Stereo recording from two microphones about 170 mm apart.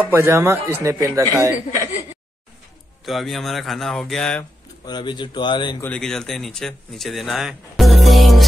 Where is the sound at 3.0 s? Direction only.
Centre (ahead or behind).